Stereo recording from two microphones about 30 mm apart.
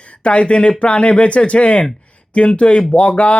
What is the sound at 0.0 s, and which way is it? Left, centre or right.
Speech, left.